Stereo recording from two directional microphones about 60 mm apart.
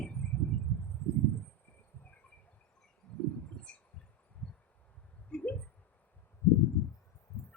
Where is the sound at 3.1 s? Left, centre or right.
Centre.